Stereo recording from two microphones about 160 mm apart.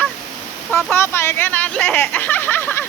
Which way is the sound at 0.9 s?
15° left (ahead or behind).